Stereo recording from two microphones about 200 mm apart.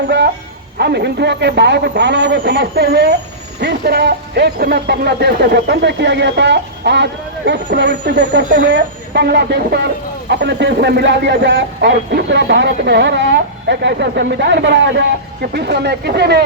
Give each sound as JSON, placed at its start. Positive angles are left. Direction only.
{"t": 0.8, "sound": "speech", "side_deg": -55}